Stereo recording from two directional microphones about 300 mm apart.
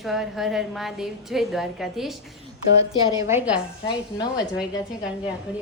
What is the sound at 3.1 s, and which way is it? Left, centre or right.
Speech, centre.